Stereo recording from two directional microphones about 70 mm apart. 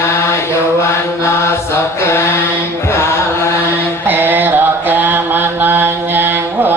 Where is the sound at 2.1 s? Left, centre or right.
Left.